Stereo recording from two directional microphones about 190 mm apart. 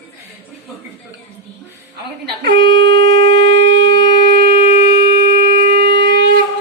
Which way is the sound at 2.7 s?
70° right (ahead or behind).